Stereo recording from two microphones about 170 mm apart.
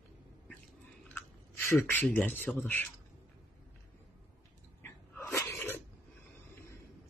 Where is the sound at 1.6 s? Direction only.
15° left (ahead or behind).